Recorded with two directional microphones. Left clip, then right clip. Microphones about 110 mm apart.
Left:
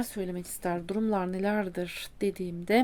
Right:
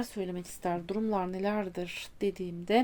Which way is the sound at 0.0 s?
45° left (ahead or behind).